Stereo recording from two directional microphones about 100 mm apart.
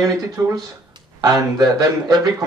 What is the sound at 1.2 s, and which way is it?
Speech, 35° right (ahead or behind).